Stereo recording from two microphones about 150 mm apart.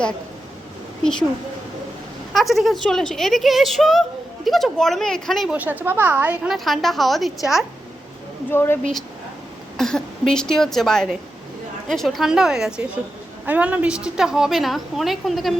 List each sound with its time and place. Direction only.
2.3 s a woman's voice: centre (ahead or behind)
5.5 s a woman's voice: 10° right (ahead or behind)
8.4 s speech: 15° left (ahead or behind)
9.7 s a woman's voice: 5° left (ahead or behind)